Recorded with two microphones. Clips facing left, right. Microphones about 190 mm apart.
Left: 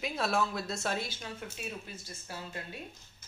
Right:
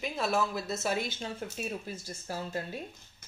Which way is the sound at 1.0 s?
25° right (ahead or behind).